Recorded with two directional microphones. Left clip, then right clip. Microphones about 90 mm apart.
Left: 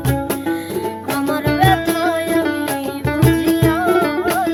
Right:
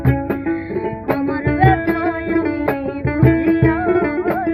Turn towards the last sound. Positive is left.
turn(degrees=45)  # may be behind; listen again after turning